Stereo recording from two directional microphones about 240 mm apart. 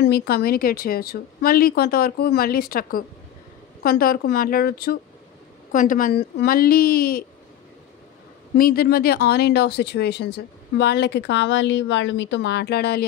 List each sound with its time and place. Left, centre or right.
0.0 s a woman's voice: left
8.5 s speech: left